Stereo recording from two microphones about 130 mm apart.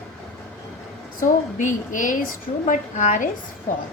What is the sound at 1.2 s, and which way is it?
Speech, 80° left.